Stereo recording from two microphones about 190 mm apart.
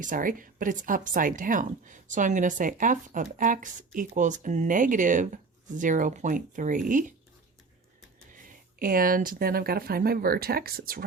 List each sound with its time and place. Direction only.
0.0 s a woman's voice: 45° right (ahead or behind)
8.3 s speech: 45° right (ahead or behind)